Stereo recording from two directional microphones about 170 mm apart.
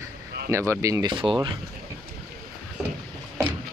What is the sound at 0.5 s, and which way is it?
Speech, 15° right (ahead or behind).